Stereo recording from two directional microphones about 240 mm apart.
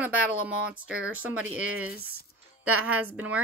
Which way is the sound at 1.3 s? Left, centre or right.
Right.